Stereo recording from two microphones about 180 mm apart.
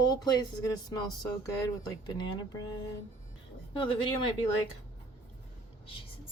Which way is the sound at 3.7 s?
30° left (ahead or behind).